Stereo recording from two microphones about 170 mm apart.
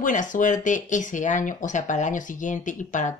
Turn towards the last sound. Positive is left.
turn(degrees=50)  # may be behind; listen again after turning